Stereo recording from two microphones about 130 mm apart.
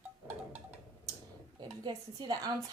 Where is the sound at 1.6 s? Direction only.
35° right (ahead or behind).